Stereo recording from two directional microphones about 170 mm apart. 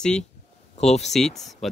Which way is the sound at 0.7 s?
40° left (ahead or behind).